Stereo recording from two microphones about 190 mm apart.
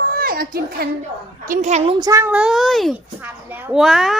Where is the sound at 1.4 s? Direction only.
40° right (ahead or behind).